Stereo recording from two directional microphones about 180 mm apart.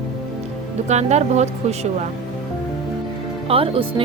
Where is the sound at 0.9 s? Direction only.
40° right (ahead or behind).